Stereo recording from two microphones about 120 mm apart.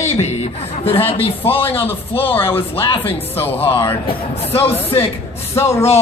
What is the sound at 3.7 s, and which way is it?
Speech, 50° left (ahead or behind).